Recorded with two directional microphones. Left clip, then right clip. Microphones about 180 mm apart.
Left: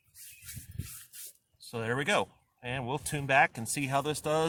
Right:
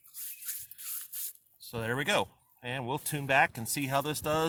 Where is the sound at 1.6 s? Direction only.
25° right (ahead or behind).